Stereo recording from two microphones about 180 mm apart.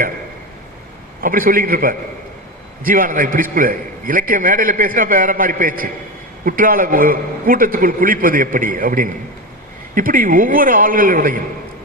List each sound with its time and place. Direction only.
1.2 s a man's voice: 50° right (ahead or behind)